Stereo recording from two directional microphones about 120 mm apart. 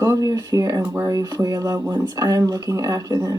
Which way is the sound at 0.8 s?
15° right (ahead or behind).